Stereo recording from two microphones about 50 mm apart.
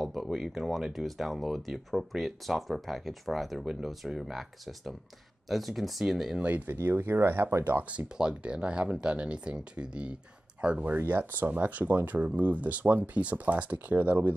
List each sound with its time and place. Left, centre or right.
0.3 s speech: centre
6.3 s speech: right
6.7 s speech: right
7.7 s speech: right
8.2 s speech: centre
11.0 s speech: right